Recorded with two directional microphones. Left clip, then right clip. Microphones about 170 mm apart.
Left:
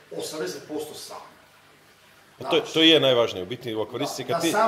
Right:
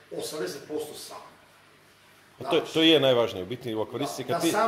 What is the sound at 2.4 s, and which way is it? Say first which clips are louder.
A man's voice: left 3 dB; 25° right (ahead or behind).